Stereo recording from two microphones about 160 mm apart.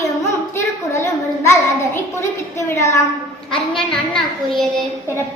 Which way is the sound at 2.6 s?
20° left (ahead or behind).